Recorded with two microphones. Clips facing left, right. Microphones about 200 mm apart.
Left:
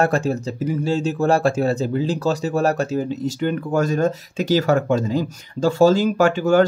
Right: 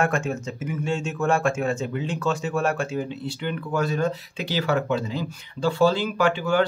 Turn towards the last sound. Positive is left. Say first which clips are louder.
# left 6 dB
turn(degrees=45)  # may be behind; listen again after turning